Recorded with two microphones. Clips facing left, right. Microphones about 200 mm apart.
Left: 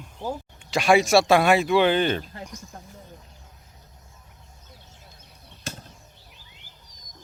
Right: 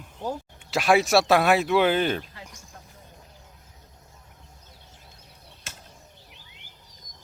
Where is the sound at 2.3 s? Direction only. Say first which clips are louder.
Left 7 dB; 45° left (ahead or behind).